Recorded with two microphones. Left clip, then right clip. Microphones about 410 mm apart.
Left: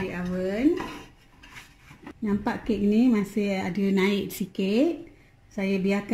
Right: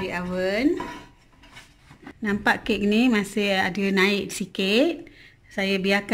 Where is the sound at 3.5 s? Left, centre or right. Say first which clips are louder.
Right 5 dB; right.